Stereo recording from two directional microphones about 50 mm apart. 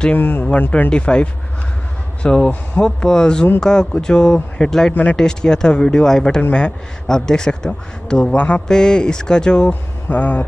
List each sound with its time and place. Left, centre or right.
0.1 s speech: left
0.8 s a man's voice: left
8.4 s speech: left
8.6 s a man's voice: centre
9.7 s speech: left